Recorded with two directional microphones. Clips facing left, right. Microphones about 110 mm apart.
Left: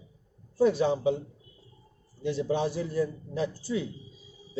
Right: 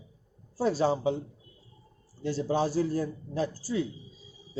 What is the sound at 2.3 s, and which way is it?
A man's voice, 35° right (ahead or behind).